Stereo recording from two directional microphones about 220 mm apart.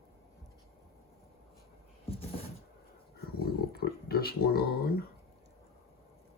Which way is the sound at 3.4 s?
45° left (ahead or behind).